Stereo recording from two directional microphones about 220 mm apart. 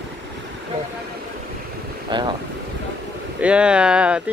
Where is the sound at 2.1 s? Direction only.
20° right (ahead or behind).